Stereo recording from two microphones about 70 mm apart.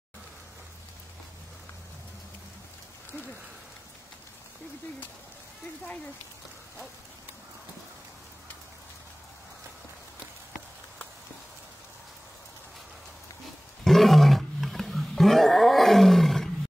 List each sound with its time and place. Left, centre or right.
13.8 s roaring cats: centre